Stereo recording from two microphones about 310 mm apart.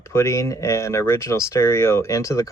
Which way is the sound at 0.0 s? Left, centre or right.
Centre.